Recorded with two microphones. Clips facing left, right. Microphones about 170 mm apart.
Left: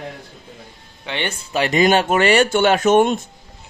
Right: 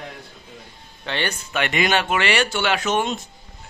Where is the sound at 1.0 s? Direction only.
20° left (ahead or behind).